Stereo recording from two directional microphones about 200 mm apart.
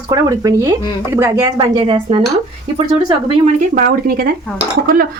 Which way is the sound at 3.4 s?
45° right (ahead or behind).